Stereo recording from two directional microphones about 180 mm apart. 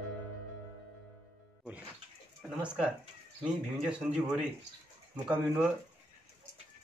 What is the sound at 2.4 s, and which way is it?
Speech, 5° right (ahead or behind).